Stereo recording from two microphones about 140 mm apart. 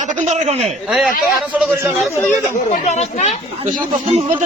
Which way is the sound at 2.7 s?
55° left (ahead or behind).